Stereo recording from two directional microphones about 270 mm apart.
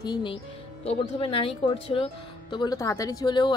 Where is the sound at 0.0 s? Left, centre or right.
Centre.